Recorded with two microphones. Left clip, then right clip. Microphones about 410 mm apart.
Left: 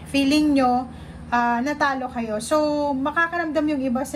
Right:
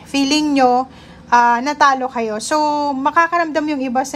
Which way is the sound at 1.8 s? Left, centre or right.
Centre.